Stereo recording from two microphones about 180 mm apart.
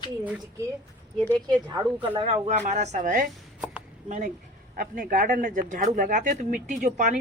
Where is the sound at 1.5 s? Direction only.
25° right (ahead or behind).